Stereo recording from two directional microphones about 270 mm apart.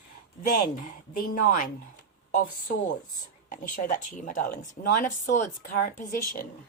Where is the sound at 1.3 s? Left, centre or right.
Left.